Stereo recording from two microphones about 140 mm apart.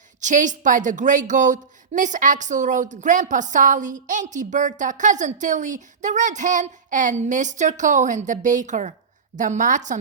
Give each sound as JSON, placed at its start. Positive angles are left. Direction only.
{"t": 0.2, "sound": "a woman's voice", "side_deg": -60}